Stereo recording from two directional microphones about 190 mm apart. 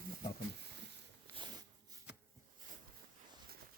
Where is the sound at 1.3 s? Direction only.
20° right (ahead or behind).